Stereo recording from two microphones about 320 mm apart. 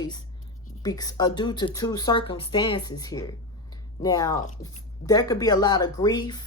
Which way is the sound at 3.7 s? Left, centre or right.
Centre.